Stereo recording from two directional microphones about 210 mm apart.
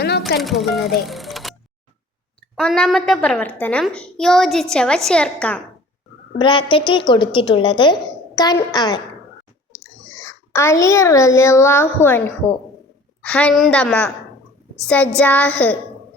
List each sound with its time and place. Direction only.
0.3 s speech: centre (ahead or behind)
2.6 s a child's voice: 5° left (ahead or behind)
6.4 s a woman's voice: 25° left (ahead or behind)
10.2 s a child's voice: 10° left (ahead or behind)